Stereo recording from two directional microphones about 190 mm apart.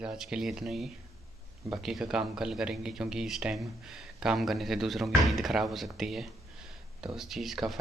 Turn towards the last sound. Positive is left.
turn(degrees=0)  # may be behind; listen again after turning